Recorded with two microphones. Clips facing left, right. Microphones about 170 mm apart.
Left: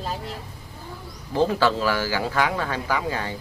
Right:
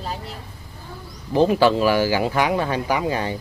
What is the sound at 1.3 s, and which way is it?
Speech, 20° right (ahead or behind).